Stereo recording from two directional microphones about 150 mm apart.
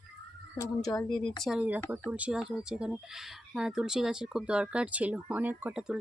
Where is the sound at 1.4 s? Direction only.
5° right (ahead or behind).